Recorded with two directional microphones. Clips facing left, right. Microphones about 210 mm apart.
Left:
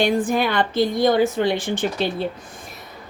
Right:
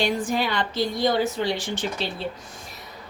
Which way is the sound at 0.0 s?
55° left (ahead or behind).